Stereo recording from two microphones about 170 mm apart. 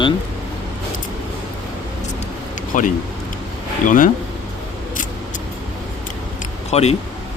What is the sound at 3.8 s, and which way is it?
Speech, 55° left (ahead or behind).